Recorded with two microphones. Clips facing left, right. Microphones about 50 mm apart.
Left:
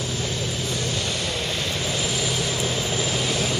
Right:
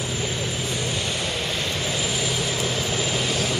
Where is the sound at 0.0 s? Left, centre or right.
Centre.